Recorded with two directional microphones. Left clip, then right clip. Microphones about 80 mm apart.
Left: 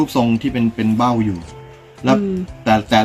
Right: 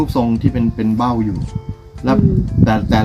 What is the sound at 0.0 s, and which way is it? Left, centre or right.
Speech, centre.